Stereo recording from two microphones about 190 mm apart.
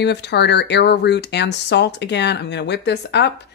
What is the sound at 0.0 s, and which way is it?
Speech, 65° left (ahead or behind).